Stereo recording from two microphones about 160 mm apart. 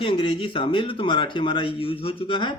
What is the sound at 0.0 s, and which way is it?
Speech, 35° left (ahead or behind).